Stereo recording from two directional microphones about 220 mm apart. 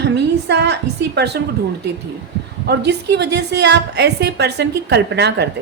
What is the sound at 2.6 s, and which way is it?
A woman's voice, 50° right (ahead or behind).